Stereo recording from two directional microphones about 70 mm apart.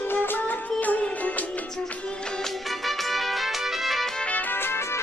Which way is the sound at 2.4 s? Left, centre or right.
Centre.